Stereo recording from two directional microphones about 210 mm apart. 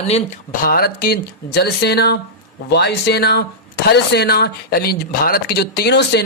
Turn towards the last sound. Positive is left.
turn(degrees=50)  # may be behind; listen again after turning